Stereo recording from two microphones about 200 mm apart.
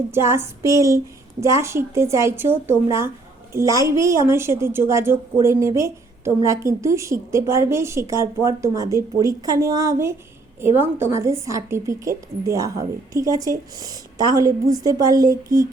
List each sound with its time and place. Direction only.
0.1 s a woman's voice: 15° right (ahead or behind)